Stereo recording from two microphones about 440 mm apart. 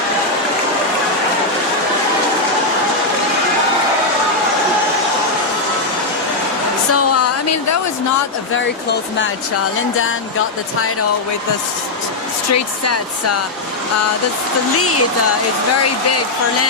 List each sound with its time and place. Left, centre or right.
6.9 s a sound: left
12.5 s speech: left
15.8 s speech: left